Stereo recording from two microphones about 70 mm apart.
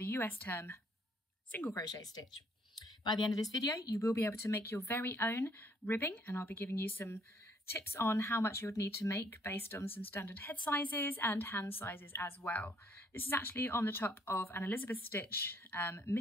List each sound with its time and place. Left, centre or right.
0.0 s speech: left
1.8 s speech: left
9.2 s speech: left
12.4 s speech: centre